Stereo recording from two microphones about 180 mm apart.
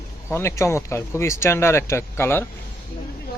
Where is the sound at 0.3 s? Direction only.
15° left (ahead or behind).